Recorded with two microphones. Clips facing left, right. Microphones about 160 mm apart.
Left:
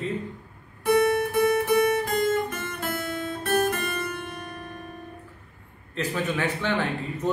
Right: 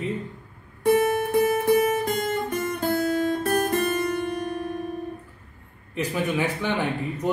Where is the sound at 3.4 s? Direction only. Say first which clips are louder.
Right 2 dB; 35° right (ahead or behind).